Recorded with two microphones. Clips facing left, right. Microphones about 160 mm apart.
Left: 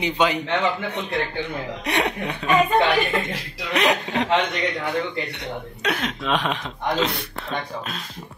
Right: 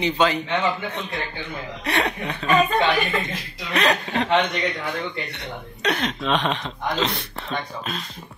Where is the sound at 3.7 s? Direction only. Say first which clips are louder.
Left 1 dB; 15° left (ahead or behind).